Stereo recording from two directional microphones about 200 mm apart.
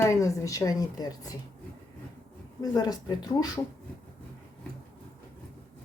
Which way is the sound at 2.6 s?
20° left (ahead or behind).